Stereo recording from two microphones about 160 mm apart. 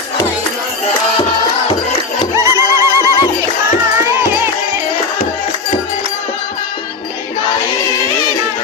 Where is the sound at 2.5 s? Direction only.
20° right (ahead or behind).